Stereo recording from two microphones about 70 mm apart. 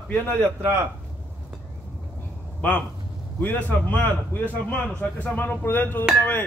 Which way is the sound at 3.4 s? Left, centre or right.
Left.